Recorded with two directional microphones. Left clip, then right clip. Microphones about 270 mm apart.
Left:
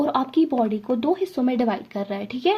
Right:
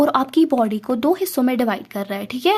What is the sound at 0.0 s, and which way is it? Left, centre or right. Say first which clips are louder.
Speech: right 5 dB; right.